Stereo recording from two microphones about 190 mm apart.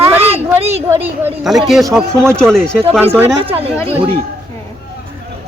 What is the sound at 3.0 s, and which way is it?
Speech, 10° right (ahead or behind).